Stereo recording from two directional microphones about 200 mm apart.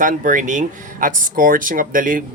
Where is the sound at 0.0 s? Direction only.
40° right (ahead or behind).